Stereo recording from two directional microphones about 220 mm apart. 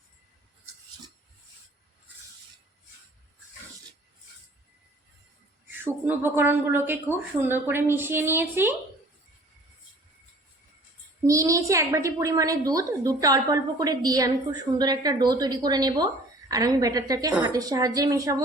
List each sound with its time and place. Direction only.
5.7 s a woman's voice: 10° right (ahead or behind)
11.3 s a woman's voice: 15° right (ahead or behind)